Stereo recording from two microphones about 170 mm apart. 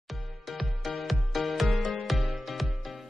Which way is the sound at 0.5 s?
Centre (ahead or behind).